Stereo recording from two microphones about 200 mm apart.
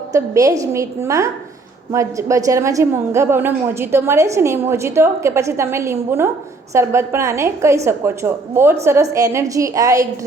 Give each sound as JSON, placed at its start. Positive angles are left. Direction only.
{"t": 0.1, "sound": "a woman's voice", "side_deg": -15}